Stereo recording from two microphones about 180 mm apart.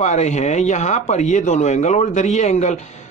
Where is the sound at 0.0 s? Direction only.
40° left (ahead or behind).